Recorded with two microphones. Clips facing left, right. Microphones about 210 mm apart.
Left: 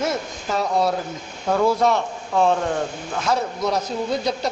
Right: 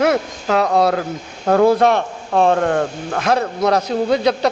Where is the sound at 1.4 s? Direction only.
60° right (ahead or behind).